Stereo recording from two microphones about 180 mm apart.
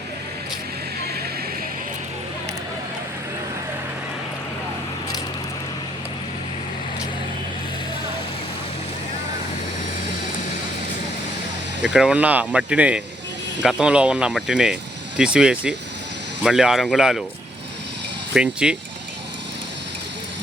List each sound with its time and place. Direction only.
11.8 s speech: 5° right (ahead or behind)
18.3 s speech: 5° right (ahead or behind)